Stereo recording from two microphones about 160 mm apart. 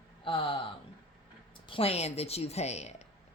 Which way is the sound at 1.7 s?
35° left (ahead or behind).